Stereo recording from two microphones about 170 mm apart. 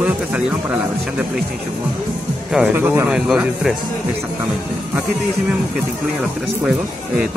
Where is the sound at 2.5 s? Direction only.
10° right (ahead or behind).